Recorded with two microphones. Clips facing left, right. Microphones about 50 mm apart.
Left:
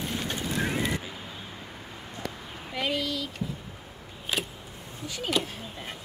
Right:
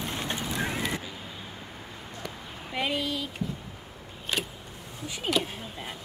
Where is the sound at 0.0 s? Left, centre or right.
Right.